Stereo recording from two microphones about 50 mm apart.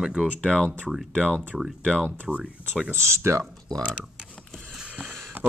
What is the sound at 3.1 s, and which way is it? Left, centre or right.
Speech, right.